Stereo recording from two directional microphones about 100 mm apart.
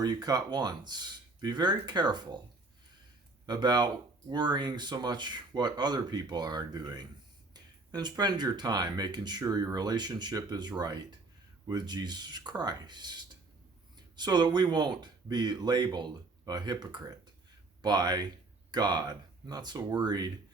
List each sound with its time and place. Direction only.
0.0 s speech: 40° right (ahead or behind)
3.4 s speech: 45° right (ahead or behind)